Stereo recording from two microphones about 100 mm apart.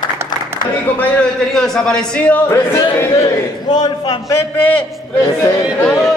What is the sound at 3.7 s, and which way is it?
Speech, 45° left (ahead or behind).